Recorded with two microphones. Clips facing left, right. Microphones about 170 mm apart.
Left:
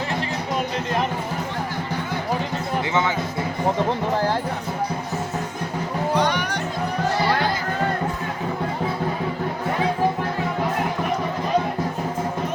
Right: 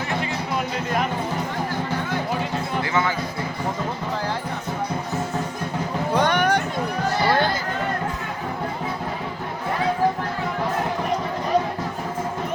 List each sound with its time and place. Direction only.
6.1 s music: 55° right (ahead or behind)